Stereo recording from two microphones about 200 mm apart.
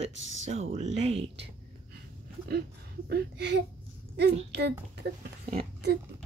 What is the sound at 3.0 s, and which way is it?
Speech, 55° right (ahead or behind).